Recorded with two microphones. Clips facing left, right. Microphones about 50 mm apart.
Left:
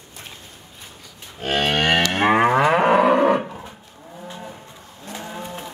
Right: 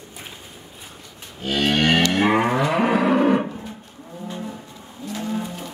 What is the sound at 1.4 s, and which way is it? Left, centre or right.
Cattle, left.